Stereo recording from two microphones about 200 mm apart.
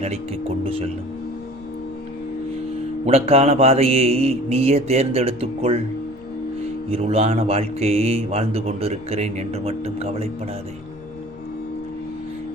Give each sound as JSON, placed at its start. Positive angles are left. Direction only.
{"t": 0.0, "sound": "speech", "side_deg": -30}
{"t": 3.1, "sound": "speech", "side_deg": -30}
{"t": 6.9, "sound": "speech", "side_deg": -30}